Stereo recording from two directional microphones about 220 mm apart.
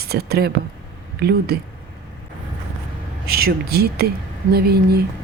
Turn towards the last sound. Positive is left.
turn(degrees=-45)  # may be behind; listen again after turning